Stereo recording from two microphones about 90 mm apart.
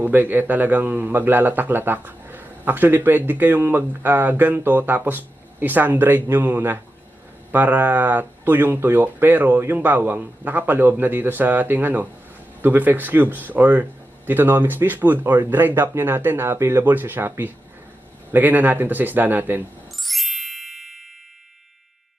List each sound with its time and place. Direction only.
0.0 s a man's voice: 20° right (ahead or behind)
20.0 s ding: centre (ahead or behind)